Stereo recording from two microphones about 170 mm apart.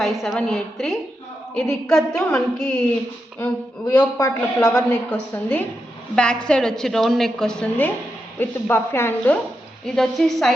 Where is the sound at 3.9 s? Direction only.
20° left (ahead or behind).